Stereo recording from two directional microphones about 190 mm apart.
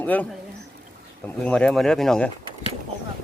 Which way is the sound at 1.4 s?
5° left (ahead or behind).